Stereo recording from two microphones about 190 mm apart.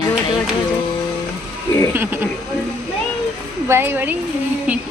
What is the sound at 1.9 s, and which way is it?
Speech, 10° right (ahead or behind).